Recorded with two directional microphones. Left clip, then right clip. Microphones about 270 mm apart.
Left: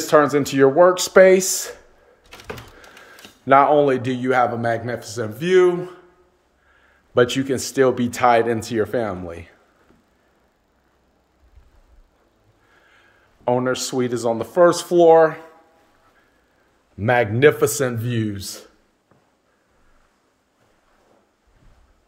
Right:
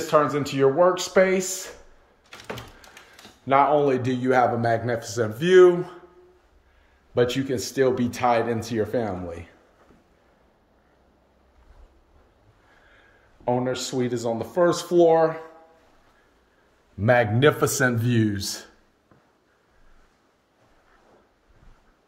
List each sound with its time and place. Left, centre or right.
0.0 s speech: centre
3.4 s a man's voice: centre
7.2 s speech: centre
13.4 s speech: centre
17.0 s a man's voice: centre